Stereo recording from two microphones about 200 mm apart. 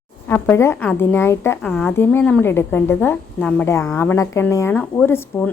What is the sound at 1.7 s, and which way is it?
A woman's voice, centre (ahead or behind).